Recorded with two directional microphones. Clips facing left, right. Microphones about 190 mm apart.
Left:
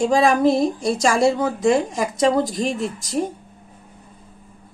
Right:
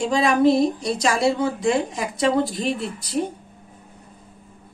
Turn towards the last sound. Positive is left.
turn(degrees=45)  # may be behind; listen again after turning